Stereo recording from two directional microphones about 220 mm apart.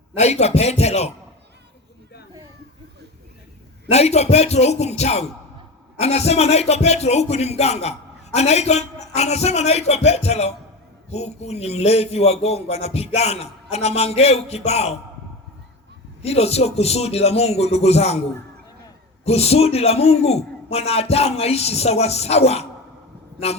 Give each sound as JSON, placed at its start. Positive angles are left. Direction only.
{"t": 0.2, "sound": "a man's voice", "side_deg": 30}
{"t": 3.9, "sound": "a man's voice", "side_deg": 30}
{"t": 16.2, "sound": "a man's voice", "side_deg": 30}
{"t": 19.2, "sound": "a man's voice", "side_deg": 30}